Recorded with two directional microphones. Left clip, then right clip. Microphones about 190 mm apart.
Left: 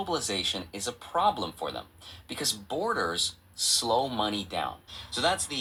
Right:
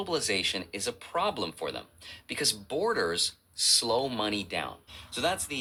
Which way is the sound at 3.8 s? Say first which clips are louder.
Left 4 dB; 15° right (ahead or behind).